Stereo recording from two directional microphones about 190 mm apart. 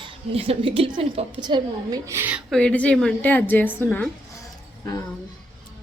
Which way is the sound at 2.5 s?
5° left (ahead or behind).